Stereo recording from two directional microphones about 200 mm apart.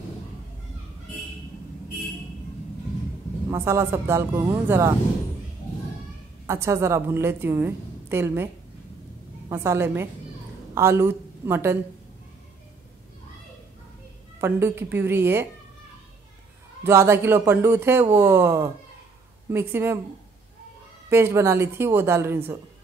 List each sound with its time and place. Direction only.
3.4 s a woman's voice: 15° right (ahead or behind)
6.4 s a woman's voice: 15° right (ahead or behind)
9.5 s a woman's voice: 10° right (ahead or behind)
14.4 s a woman's voice: 10° right (ahead or behind)
16.8 s a woman's voice: 15° right (ahead or behind)
21.1 s a woman's voice: 10° right (ahead or behind)